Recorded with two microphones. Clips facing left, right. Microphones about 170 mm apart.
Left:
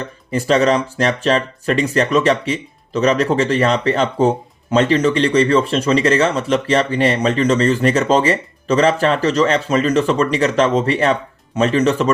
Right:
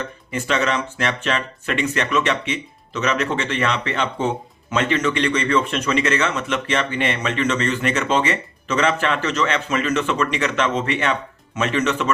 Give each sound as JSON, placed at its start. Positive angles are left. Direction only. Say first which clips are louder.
{"t": 0.3, "sound": "speech", "louder": "left 8 dB", "side_deg": 35}